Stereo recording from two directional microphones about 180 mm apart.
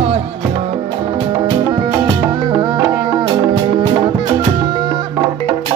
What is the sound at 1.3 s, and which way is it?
Music, 25° right (ahead or behind).